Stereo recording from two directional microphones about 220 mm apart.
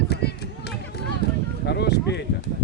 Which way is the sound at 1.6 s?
50° left (ahead or behind).